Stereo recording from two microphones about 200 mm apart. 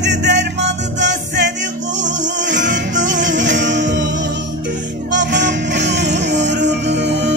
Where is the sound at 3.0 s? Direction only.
65° right (ahead or behind).